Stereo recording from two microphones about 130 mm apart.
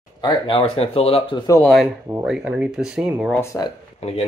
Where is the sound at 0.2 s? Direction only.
40° left (ahead or behind).